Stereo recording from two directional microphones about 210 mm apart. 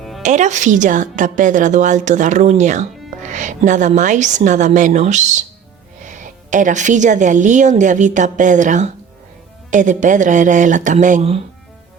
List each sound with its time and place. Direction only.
0.2 s a woman's voice: 35° right (ahead or behind)